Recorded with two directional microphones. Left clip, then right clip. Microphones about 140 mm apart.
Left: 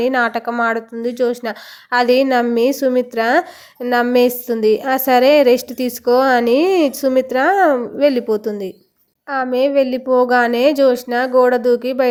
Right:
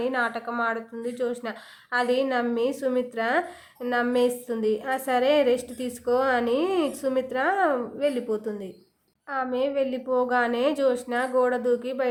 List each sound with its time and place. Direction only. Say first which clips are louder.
0.0 s a woman's voice: left 10 dB; 45° left (ahead or behind)